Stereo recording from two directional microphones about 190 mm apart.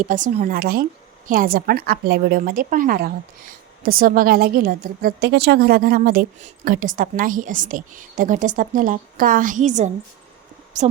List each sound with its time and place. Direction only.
0.0 s a woman's voice: 40° right (ahead or behind)